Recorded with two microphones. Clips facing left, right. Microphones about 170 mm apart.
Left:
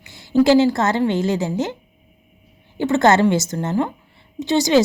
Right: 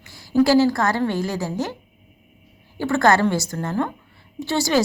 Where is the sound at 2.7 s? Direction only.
20° left (ahead or behind).